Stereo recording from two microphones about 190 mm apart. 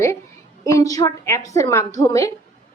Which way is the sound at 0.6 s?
15° left (ahead or behind).